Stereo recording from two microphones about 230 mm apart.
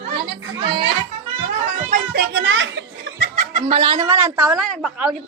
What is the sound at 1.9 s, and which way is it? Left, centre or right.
A child's voice, right.